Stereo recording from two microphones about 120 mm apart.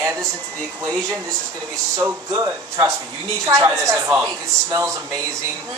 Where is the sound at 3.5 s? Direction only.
25° right (ahead or behind).